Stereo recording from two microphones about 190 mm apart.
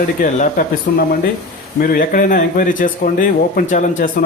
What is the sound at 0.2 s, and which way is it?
A man's voice, 45° left (ahead or behind).